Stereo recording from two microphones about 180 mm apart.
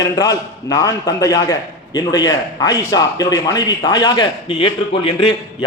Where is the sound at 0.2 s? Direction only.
20° left (ahead or behind).